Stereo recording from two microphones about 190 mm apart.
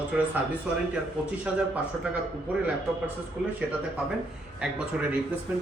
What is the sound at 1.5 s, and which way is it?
Speech, 5° right (ahead or behind).